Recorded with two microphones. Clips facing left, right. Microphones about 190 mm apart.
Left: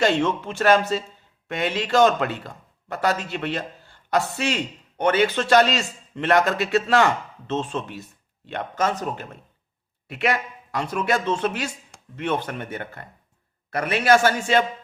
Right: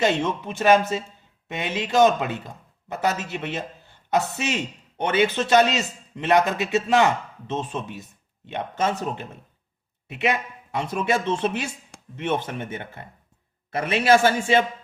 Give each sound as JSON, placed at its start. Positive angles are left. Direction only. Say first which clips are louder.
{"t": 0.0, "sound": "speech", "louder": "left 2 dB", "side_deg": -20}